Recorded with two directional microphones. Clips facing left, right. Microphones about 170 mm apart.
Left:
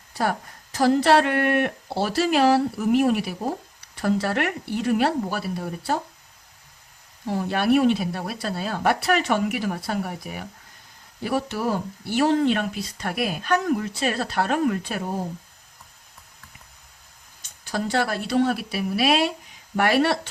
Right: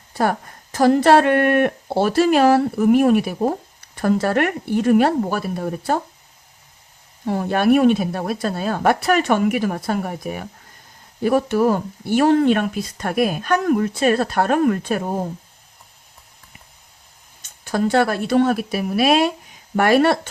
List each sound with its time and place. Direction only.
0.1 s speech: 50° right (ahead or behind)
7.3 s speech: 55° right (ahead or behind)
17.4 s speech: 50° right (ahead or behind)